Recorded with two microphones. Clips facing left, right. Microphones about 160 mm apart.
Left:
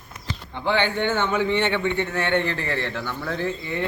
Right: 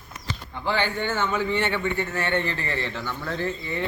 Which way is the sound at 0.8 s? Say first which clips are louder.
Left 3 dB; 20° left (ahead or behind).